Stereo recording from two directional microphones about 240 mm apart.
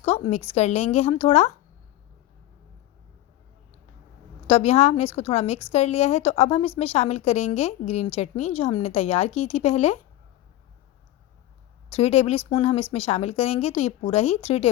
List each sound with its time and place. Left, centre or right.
0.0 s a woman's voice: left
4.4 s a woman's voice: left
11.9 s a woman's voice: left